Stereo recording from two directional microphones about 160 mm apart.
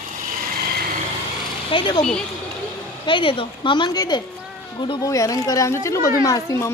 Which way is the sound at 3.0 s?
30° left (ahead or behind).